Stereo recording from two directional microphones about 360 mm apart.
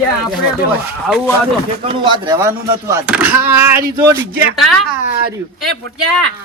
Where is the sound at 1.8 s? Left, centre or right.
Centre.